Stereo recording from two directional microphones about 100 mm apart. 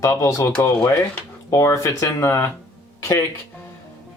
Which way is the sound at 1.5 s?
30° left (ahead or behind).